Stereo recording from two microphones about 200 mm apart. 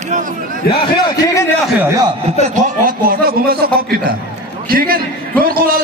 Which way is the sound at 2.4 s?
40° right (ahead or behind).